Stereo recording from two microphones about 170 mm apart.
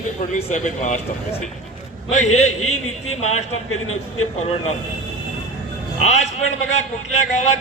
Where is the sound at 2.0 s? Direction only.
40° left (ahead or behind).